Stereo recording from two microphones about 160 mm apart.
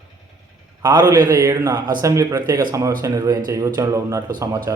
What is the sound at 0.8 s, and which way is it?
A man's voice, 25° right (ahead or behind).